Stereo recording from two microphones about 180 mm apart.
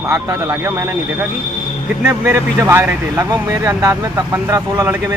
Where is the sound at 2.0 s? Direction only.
15° right (ahead or behind).